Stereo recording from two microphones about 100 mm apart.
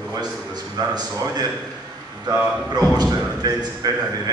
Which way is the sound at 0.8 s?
40° right (ahead or behind).